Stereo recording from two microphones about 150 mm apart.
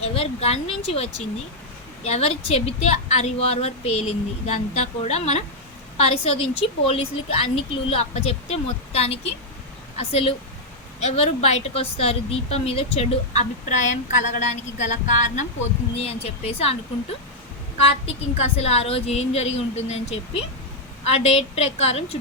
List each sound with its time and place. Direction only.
0.0 s a woman's voice: 40° left (ahead or behind)
16.0 s a woman's voice: 40° left (ahead or behind)